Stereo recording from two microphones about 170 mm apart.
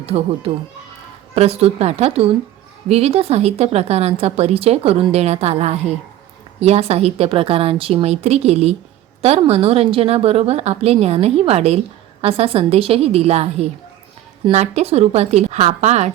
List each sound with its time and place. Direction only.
0.0 s a woman's voice: 35° right (ahead or behind)